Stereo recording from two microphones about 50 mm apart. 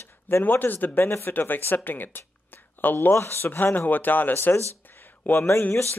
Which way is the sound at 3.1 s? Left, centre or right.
Left.